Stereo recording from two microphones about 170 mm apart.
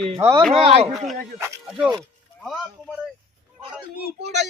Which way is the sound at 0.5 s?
35° right (ahead or behind).